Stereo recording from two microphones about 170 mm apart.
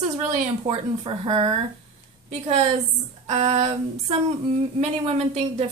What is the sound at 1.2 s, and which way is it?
Speech, 30° right (ahead or behind).